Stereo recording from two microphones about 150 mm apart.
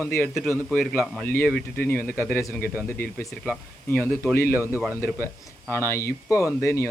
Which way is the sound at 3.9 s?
10° left (ahead or behind).